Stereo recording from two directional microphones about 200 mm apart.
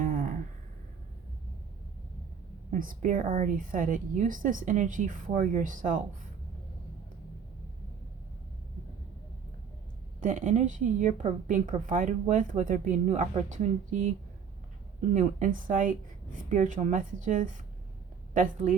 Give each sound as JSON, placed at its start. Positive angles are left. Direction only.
{"t": 0.0, "sound": "a sound", "side_deg": -40}
{"t": 2.6, "sound": "a woman's voice", "side_deg": -45}
{"t": 10.2, "sound": "a woman's voice", "side_deg": -40}
{"t": 15.1, "sound": "a woman's voice", "side_deg": -40}